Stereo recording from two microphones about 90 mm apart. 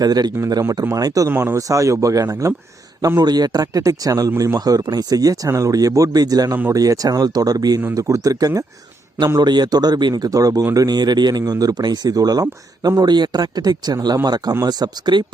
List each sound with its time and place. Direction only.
0.0 s speech: 50° right (ahead or behind)
0.3 s speech: 35° right (ahead or behind)
1.3 s speech: 25° right (ahead or behind)
1.5 s speech: 35° right (ahead or behind); by 15.2 s 50° right (ahead or behind)